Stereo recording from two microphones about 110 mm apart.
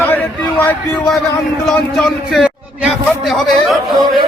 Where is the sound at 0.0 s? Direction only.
15° left (ahead or behind).